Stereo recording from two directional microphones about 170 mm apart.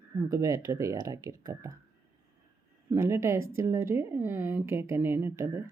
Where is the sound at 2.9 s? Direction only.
15° right (ahead or behind).